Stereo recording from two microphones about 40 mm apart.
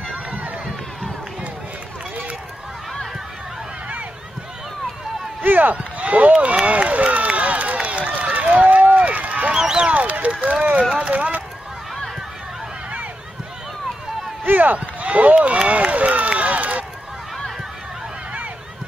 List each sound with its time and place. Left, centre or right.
5.4 s run: right
5.8 s run: right
9.5 s a sound: centre
9.8 s run: right
14.4 s run: right
15.3 s speech: right
15.7 s run: right